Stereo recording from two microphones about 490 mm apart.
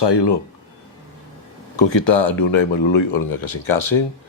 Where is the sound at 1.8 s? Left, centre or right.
Left.